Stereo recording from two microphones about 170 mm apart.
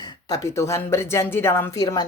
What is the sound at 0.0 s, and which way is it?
Speech, 20° left (ahead or behind).